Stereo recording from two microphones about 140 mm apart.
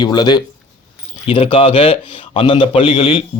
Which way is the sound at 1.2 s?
40° left (ahead or behind).